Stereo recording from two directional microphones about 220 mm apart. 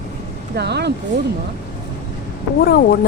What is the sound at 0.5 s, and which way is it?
Speech, 50° right (ahead or behind).